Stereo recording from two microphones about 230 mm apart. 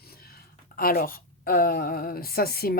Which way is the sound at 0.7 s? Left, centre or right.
Left.